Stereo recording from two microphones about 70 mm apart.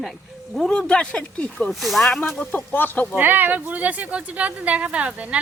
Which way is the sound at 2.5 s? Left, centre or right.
Left.